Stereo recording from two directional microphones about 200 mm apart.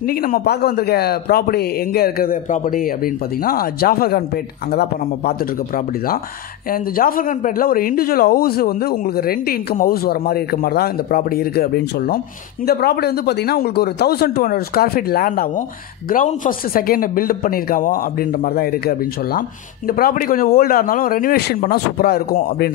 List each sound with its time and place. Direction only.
0.1 s speech: 50° left (ahead or behind)
6.7 s speech: 45° left (ahead or behind)